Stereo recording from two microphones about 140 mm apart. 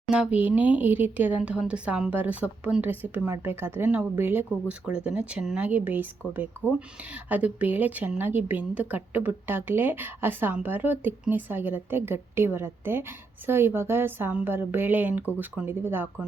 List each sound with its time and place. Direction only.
0.1 s speech: 10° right (ahead or behind)